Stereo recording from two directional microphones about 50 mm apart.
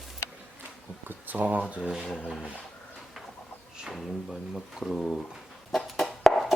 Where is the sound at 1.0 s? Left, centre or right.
Right.